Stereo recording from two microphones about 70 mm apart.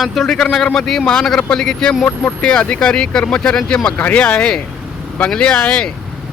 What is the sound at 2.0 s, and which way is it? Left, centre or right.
Speech, left.